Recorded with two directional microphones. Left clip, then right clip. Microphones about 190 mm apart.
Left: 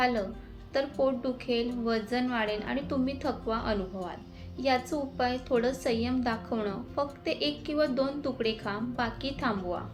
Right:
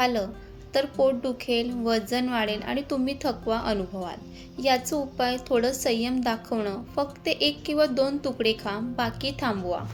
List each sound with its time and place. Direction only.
0.0 s a woman's voice: 50° right (ahead or behind)